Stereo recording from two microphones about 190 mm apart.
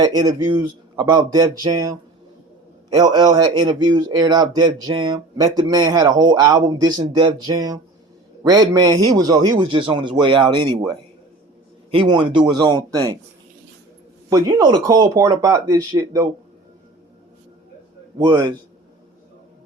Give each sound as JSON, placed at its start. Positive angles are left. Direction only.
{"t": 0.0, "sound": "speech", "side_deg": -20}
{"t": 14.3, "sound": "speech", "side_deg": -20}
{"t": 18.2, "sound": "speech", "side_deg": -25}